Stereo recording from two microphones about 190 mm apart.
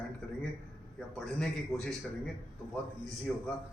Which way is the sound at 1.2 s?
5° left (ahead or behind).